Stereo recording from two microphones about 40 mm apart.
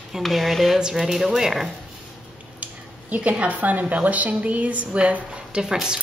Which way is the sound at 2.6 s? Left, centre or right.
Right.